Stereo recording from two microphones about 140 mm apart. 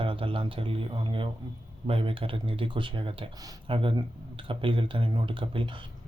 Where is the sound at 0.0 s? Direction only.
40° right (ahead or behind).